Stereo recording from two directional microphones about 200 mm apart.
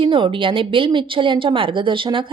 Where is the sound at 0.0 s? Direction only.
25° right (ahead or behind).